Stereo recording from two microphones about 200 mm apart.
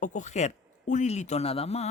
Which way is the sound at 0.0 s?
40° left (ahead or behind).